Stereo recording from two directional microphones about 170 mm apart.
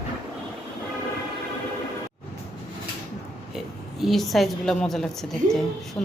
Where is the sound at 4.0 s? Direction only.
Centre (ahead or behind).